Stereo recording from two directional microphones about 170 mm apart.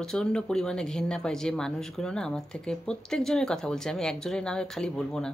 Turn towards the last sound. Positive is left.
turn(degrees=5)  # may be behind; listen again after turning